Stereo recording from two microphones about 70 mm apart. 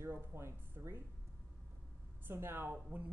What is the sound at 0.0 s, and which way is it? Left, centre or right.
Speech, right.